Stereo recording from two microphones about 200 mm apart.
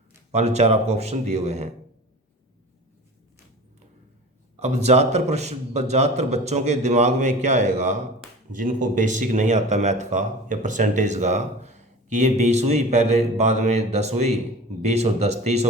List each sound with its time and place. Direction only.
0.3 s speech: 35° right (ahead or behind)
4.6 s speech: 35° right (ahead or behind)